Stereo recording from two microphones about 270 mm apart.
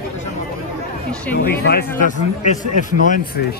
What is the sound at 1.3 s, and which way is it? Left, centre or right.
A man's voice, left.